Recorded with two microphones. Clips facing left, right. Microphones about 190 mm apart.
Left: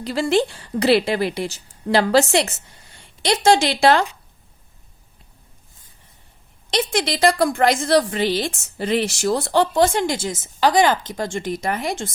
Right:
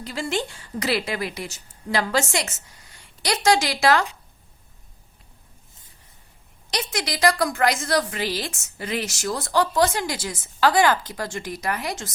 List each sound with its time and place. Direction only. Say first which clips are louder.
0.0 s a woman's voice: left 8 dB; 35° left (ahead or behind)
6.9 s a woman's voice: left 3 dB; 30° left (ahead or behind)